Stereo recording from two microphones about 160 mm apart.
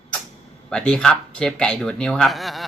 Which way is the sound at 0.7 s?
5° left (ahead or behind).